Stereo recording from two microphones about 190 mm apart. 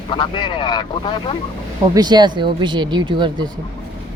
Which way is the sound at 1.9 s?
20° right (ahead or behind).